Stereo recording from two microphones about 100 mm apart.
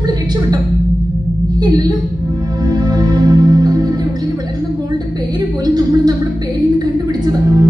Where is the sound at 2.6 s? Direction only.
40° right (ahead or behind).